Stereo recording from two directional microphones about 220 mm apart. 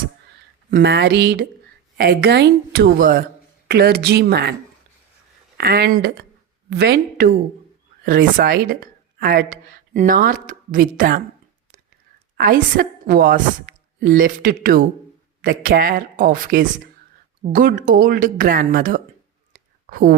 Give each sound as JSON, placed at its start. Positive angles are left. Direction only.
{"t": 0.7, "sound": "a woman's voice", "side_deg": -50}
{"t": 5.5, "sound": "a woman's voice", "side_deg": -45}
{"t": 12.4, "sound": "speech", "side_deg": -40}
{"t": 13.7, "sound": "a sound", "side_deg": -40}
{"t": 14.0, "sound": "speech", "side_deg": -40}
{"t": 19.5, "sound": "a sound", "side_deg": -40}